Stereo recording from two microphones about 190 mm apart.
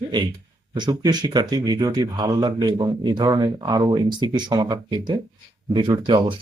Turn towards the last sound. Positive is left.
turn(degrees=-25)  # may be behind; listen again after turning